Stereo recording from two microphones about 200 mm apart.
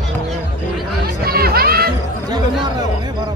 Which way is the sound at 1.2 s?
50° right (ahead or behind).